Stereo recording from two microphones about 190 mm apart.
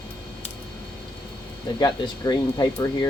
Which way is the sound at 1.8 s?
20° left (ahead or behind).